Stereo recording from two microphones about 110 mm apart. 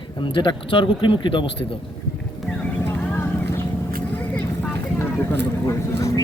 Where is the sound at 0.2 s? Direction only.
50° left (ahead or behind).